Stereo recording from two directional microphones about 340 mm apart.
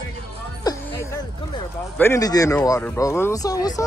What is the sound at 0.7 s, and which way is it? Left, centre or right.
Music, centre.